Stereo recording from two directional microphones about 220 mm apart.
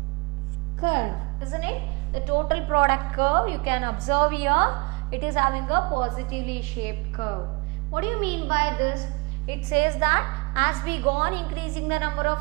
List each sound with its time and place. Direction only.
0.8 s a woman's voice: 10° right (ahead or behind)